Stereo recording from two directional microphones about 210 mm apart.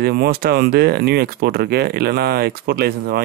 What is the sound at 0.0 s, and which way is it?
Speech, 50° right (ahead or behind).